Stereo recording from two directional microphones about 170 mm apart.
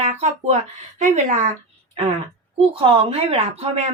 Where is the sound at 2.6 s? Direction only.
35° right (ahead or behind).